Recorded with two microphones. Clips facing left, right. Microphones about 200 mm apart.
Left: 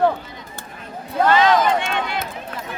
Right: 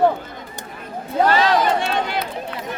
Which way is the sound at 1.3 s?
40° right (ahead or behind).